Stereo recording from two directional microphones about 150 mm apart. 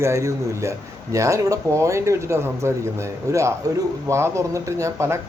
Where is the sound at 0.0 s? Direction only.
20° right (ahead or behind).